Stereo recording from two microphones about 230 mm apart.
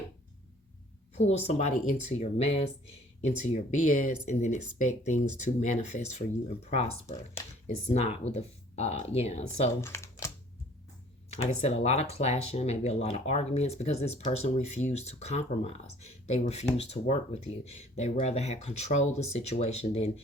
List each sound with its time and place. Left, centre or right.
1.1 s speech: left
7.4 s a sound: centre
7.9 s speech: left
9.8 s typing: centre
11.6 s speech: left